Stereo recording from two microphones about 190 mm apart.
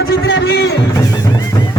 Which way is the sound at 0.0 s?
60° left (ahead or behind).